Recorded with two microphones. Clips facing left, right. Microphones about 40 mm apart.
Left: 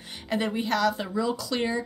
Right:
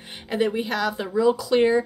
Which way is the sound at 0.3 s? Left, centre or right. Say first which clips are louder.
Right 3 dB; centre.